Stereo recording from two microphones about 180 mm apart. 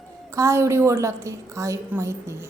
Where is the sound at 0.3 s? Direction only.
15° right (ahead or behind).